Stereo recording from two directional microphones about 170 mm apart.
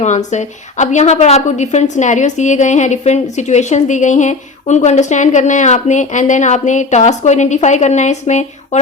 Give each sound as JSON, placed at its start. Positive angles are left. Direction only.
{"t": 0.0, "sound": "a woman's voice", "side_deg": 45}